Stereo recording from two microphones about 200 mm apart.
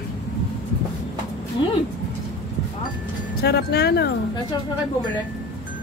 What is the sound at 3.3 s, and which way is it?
Speech, 55° left (ahead or behind).